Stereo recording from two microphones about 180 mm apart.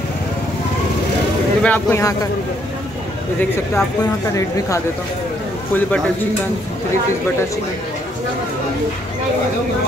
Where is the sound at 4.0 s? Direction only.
15° left (ahead or behind).